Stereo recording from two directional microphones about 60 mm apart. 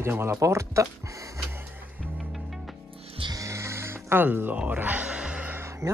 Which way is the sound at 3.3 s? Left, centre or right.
Right.